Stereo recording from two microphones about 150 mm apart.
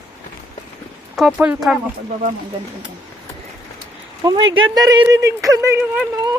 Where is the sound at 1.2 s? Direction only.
Centre (ahead or behind).